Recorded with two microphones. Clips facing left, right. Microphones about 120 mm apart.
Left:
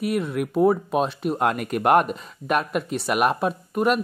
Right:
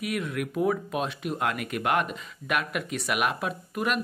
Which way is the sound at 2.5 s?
35° left (ahead or behind).